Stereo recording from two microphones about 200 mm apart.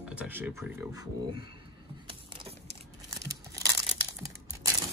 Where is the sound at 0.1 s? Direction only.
10° right (ahead or behind).